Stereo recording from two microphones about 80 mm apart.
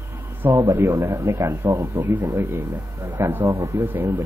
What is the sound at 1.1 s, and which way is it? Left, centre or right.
Speech, right.